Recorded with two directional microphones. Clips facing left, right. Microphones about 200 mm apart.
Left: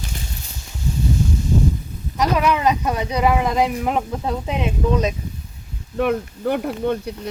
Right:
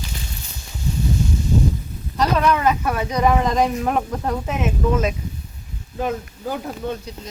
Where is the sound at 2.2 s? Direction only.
10° left (ahead or behind).